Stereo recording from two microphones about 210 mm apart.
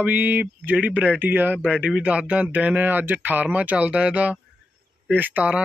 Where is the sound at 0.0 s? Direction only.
10° right (ahead or behind).